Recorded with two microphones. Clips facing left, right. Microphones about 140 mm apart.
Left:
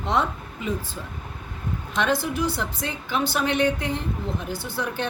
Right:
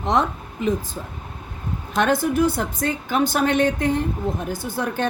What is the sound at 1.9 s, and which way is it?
A woman's voice, 50° right (ahead or behind).